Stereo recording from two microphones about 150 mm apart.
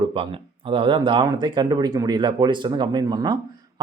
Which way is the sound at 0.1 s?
35° right (ahead or behind).